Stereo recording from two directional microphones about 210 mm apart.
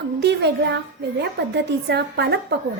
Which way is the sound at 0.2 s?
55° right (ahead or behind).